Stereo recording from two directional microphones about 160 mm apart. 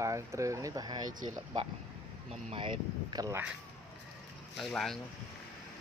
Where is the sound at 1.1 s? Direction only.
50° right (ahead or behind).